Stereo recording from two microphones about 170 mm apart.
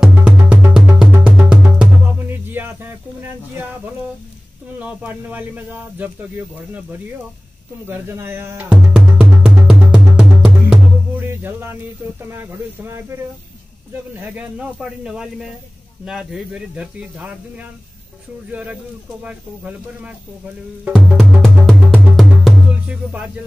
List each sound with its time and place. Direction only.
0.1 s music: 10° right (ahead or behind)
4.7 s speech: 10° right (ahead or behind)
7.8 s music: 15° right (ahead or behind)
12.3 s speech: 15° right (ahead or behind)
14.2 s speech: 10° right (ahead or behind)
18.5 s speech: 10° right (ahead or behind)
21.9 s music: centre (ahead or behind)